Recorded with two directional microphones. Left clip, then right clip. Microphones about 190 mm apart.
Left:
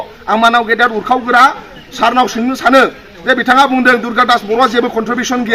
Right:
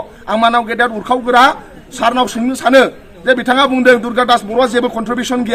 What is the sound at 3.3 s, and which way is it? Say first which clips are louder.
A man's voice: left 3 dB; 30° right (ahead or behind).